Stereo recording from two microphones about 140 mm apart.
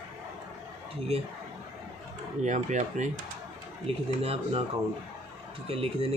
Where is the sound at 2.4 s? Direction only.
60° right (ahead or behind).